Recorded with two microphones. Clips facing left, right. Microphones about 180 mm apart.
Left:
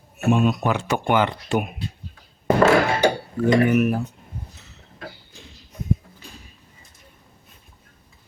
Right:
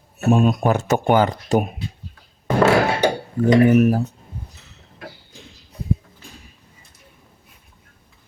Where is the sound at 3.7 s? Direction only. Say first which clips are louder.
Right 4 dB; 35° right (ahead or behind).